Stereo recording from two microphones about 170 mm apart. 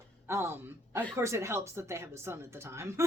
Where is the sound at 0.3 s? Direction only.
15° right (ahead or behind).